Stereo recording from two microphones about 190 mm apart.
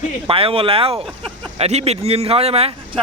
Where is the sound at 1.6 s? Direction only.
35° right (ahead or behind).